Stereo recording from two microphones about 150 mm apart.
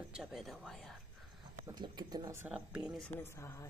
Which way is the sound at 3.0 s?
15° left (ahead or behind).